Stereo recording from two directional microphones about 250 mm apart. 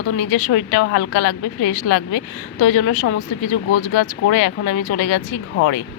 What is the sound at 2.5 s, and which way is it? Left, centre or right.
A woman's voice, left.